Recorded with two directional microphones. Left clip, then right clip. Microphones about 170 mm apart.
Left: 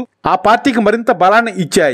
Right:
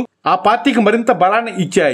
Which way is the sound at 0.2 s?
40° left (ahead or behind).